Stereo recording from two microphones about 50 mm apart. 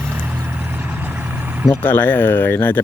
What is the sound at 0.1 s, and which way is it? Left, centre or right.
Vehicle, right.